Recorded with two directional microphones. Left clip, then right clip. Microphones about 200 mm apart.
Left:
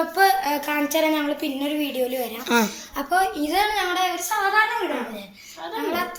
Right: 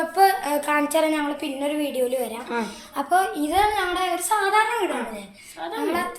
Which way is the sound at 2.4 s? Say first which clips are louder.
Left 7 dB; 55° left (ahead or behind).